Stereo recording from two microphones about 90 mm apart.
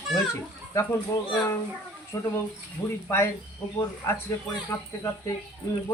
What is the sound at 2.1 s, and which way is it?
Speech, 35° left (ahead or behind).